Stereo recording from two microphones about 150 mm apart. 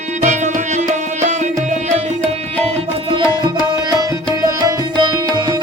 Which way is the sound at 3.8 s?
25° right (ahead or behind).